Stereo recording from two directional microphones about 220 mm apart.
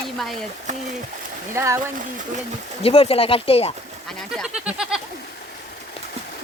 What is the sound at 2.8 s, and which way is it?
Speech, 25° left (ahead or behind).